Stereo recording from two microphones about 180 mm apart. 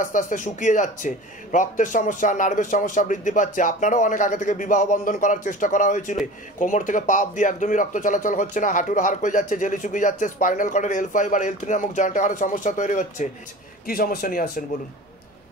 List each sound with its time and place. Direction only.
0.0 s speech: 45° left (ahead or behind)
13.8 s speech: 55° left (ahead or behind)